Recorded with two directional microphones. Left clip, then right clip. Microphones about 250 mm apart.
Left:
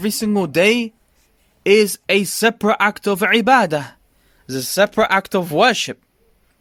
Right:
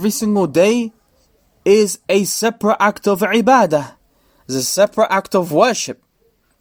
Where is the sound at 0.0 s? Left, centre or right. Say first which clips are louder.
Right 3 dB; left.